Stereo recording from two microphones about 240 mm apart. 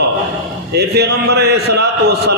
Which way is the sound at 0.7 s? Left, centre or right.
Right.